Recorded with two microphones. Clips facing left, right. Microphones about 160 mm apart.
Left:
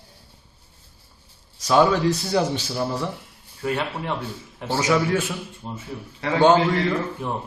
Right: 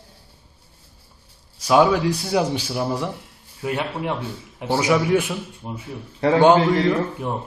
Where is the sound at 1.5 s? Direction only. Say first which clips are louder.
Right 2 dB; 10° right (ahead or behind).